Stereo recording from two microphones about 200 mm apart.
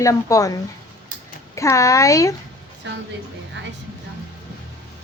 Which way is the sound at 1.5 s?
15° left (ahead or behind).